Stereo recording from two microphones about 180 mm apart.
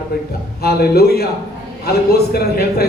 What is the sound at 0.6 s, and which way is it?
A man's voice, 60° left (ahead or behind).